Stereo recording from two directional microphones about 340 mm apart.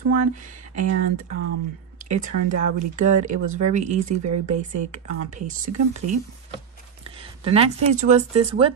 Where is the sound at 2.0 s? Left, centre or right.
Right.